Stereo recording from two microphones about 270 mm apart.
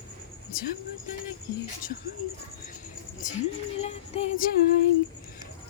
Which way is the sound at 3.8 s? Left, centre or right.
Left.